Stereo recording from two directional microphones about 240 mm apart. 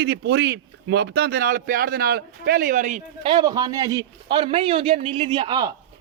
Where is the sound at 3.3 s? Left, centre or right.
Centre.